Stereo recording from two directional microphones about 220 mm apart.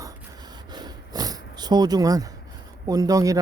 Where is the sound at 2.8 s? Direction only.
15° right (ahead or behind).